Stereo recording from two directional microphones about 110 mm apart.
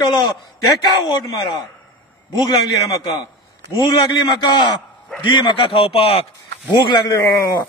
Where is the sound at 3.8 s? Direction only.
45° left (ahead or behind); by 6.2 s 60° left (ahead or behind).